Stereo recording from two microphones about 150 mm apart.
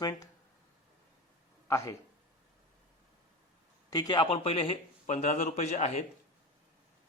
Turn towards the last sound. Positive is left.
turn(degrees=50)  # may be behind; listen again after turning